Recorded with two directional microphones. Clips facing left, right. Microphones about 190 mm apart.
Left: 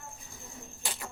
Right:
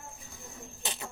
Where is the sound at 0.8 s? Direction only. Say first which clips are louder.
Right 1 dB; 20° right (ahead or behind).